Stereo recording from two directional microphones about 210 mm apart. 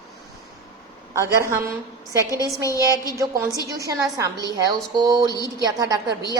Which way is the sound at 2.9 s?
15° left (ahead or behind).